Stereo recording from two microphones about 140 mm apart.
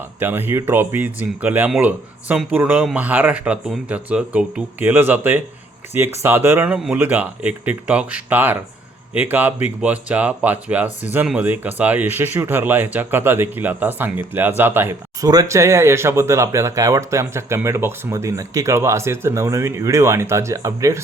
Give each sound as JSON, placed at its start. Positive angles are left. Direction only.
{"t": 0.2, "sound": "speech", "side_deg": -15}